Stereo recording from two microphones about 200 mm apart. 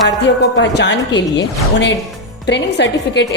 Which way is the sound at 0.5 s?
60° left (ahead or behind).